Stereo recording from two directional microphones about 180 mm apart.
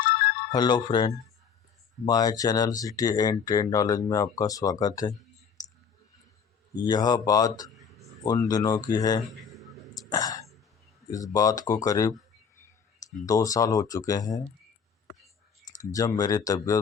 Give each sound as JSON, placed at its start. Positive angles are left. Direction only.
{"t": 0.0, "sound": "music", "side_deg": 60}
{"t": 0.5, "sound": "speech", "side_deg": 25}
{"t": 5.6, "sound": "clicking", "side_deg": 20}
{"t": 6.7, "sound": "speech", "side_deg": 20}
{"t": 9.3, "sound": "a sound", "side_deg": 0}
{"t": 10.1, "sound": "throat clearing", "side_deg": 20}
{"t": 11.1, "sound": "speech", "side_deg": 20}
{"t": 15.9, "sound": "speech", "side_deg": 20}